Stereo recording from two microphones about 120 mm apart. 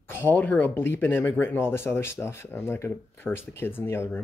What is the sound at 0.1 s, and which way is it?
Speech, 20° left (ahead or behind).